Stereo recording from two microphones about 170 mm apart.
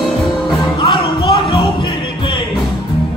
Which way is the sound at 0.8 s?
30° left (ahead or behind).